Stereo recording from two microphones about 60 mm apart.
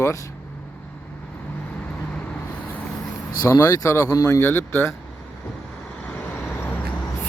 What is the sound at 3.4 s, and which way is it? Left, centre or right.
Speech, left.